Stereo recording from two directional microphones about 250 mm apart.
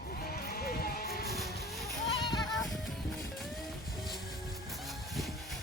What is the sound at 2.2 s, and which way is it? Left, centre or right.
Music, centre.